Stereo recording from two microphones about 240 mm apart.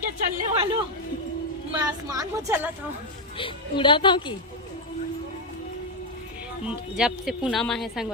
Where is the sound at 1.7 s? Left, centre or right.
Centre.